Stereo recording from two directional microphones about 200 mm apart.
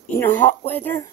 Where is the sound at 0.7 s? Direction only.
10° left (ahead or behind).